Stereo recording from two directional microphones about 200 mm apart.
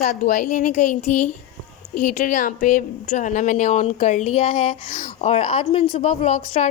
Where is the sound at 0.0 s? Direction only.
40° left (ahead or behind).